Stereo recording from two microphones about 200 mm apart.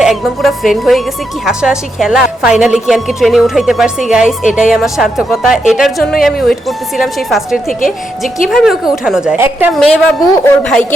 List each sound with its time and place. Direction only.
0.0 s a woman's voice: centre (ahead or behind)